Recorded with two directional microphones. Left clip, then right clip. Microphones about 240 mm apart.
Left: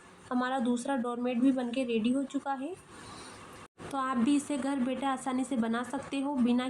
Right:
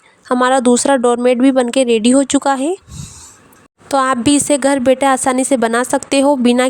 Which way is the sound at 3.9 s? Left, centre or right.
Right.